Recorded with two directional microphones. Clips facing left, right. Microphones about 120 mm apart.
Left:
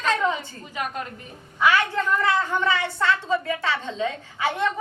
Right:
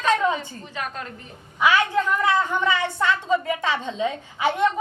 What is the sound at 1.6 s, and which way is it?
A woman's voice, 15° right (ahead or behind).